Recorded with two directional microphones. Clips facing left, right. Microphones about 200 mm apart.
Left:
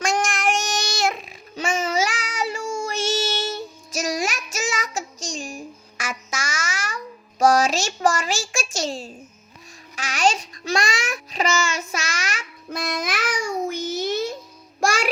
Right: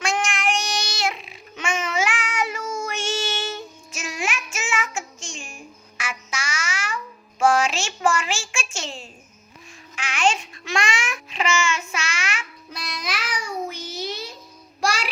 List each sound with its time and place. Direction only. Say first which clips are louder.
0.0 s child singing: left 2 dB; 40° left (ahead or behind)
9.9 s babbling: left 1 dB; 40° left (ahead or behind)
14.8 s music: left 4 dB; 50° left (ahead or behind)